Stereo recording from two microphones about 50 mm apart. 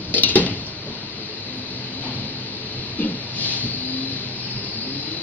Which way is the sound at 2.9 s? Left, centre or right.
Left.